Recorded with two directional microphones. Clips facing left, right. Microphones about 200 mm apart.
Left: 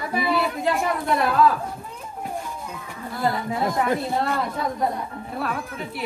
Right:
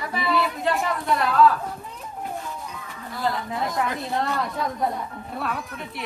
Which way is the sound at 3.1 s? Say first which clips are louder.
Left 2 dB; centre (ahead or behind).